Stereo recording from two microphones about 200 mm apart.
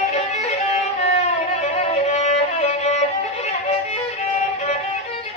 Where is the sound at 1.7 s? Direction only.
35° left (ahead or behind).